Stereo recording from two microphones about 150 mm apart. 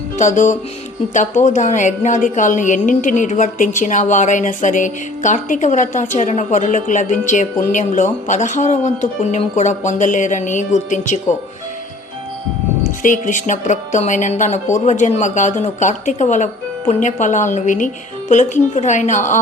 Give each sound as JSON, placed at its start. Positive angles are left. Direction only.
{"t": 0.2, "sound": "a woman's voice", "side_deg": 55}
{"t": 13.0, "sound": "a woman's voice", "side_deg": 60}